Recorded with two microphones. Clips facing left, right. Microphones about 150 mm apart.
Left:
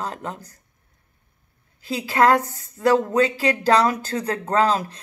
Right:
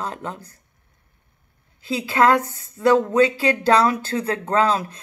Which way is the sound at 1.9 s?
35° left (ahead or behind).